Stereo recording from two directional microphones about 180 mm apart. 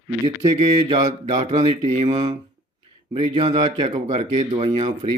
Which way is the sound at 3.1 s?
25° right (ahead or behind).